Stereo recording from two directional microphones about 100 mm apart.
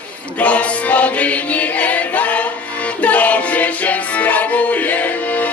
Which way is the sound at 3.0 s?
15° left (ahead or behind).